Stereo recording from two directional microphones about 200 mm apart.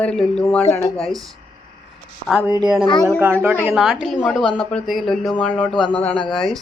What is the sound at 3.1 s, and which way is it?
Speech, 10° right (ahead or behind).